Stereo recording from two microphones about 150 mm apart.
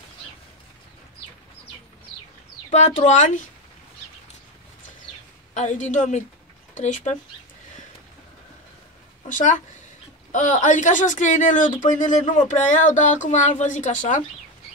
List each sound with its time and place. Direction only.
2.7 s speech: 55° left (ahead or behind)
5.5 s a woman's voice: 55° left (ahead or behind)
9.3 s speech: 55° left (ahead or behind)